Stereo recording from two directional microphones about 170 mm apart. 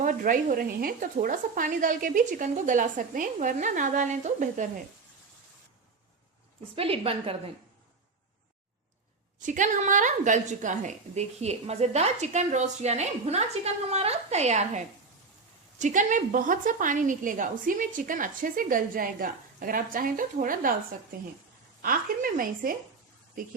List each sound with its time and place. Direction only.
0.0 s a woman's voice: 50° right (ahead or behind)
6.7 s a woman's voice: 35° right (ahead or behind)
9.4 s a woman's voice: 50° right (ahead or behind)
15.8 s a woman's voice: 50° right (ahead or behind)
21.8 s a woman's voice: 55° right (ahead or behind)